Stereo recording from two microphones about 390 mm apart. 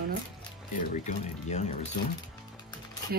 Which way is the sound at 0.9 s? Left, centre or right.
Centre.